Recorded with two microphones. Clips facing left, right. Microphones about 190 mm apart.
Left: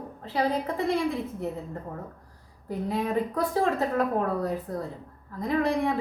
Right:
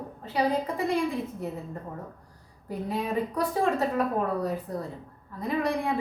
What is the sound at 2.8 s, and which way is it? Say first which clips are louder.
Speech: left 2 dB; centre (ahead or behind).